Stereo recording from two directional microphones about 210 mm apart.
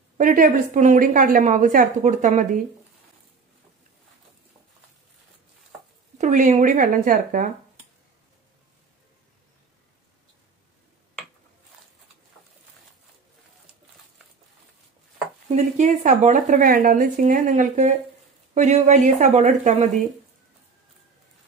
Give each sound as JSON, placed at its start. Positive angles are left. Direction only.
{"t": 0.2, "sound": "speech", "side_deg": -40}
{"t": 6.1, "sound": "speech", "side_deg": -35}
{"t": 15.5, "sound": "speech", "side_deg": -35}